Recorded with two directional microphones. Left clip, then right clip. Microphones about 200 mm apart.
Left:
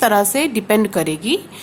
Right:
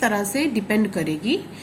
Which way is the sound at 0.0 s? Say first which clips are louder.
Left 7 dB; 45° left (ahead or behind).